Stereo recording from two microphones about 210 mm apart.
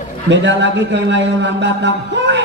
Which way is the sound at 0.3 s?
55° right (ahead or behind).